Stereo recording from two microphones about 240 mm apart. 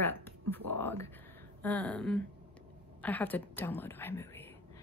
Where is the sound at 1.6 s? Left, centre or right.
Centre.